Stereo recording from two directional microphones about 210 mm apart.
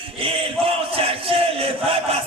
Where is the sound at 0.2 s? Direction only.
25° right (ahead or behind).